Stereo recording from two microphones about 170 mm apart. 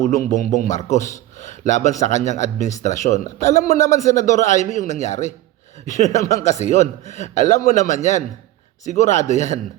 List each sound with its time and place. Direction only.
0.4 s a man's voice: 50° left (ahead or behind)